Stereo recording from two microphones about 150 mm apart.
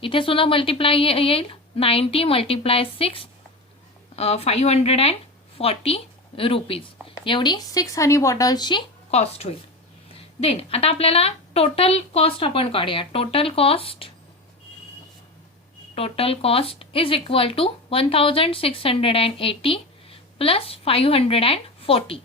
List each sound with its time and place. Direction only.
0.0 s a woman's voice: 35° left (ahead or behind)
9.0 s speech: 45° left (ahead or behind)
16.0 s speech: 40° left (ahead or behind)